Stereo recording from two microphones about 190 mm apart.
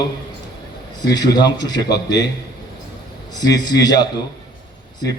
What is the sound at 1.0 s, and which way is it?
Speech, 20° left (ahead or behind).